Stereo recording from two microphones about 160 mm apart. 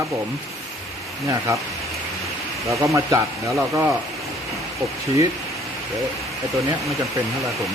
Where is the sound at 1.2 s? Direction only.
20° right (ahead or behind).